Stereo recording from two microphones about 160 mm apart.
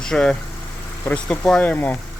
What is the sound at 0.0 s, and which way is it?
Speech, 5° left (ahead or behind).